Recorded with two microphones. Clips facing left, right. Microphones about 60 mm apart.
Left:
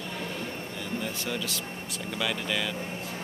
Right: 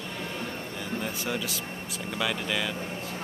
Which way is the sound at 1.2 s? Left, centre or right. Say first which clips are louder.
Right 1 dB; centre.